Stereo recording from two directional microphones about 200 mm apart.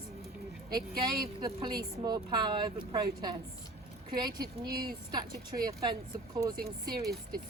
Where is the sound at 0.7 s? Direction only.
20° right (ahead or behind).